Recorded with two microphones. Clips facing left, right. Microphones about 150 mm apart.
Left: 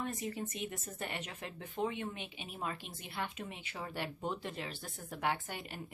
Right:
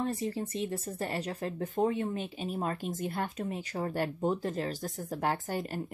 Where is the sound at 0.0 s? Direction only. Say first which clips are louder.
Right 6 dB; 30° right (ahead or behind).